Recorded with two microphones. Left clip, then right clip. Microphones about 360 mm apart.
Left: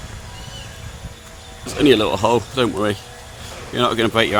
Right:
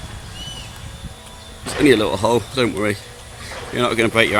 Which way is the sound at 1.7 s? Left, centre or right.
Centre.